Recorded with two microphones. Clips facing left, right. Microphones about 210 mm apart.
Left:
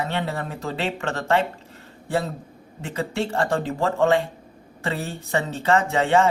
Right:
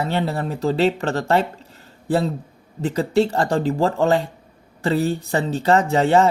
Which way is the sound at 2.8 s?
35° right (ahead or behind).